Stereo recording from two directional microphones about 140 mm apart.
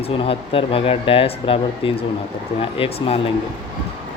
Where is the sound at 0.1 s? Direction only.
40° left (ahead or behind).